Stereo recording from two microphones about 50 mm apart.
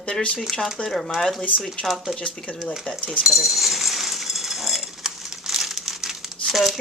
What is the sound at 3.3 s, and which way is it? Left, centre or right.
Coin, centre.